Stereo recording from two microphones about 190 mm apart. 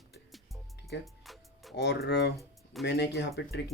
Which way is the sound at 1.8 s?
60° left (ahead or behind).